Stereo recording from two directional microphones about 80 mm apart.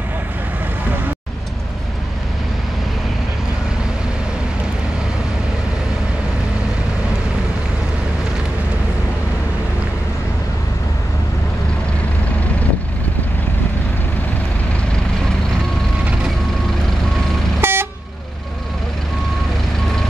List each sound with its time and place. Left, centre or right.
17.6 s vehicle: right